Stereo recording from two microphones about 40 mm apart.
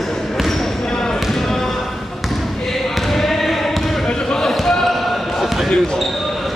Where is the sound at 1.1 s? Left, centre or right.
Centre.